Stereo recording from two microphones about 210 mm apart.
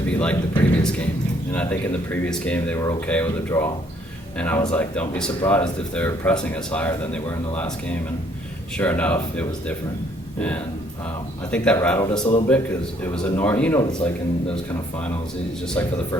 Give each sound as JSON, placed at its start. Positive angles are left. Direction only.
{"t": 0.1, "sound": "speech", "side_deg": 5}
{"t": 11.5, "sound": "speech", "side_deg": 5}
{"t": 12.2, "sound": "a man's voice", "side_deg": 25}
{"t": 13.1, "sound": "speech", "side_deg": 10}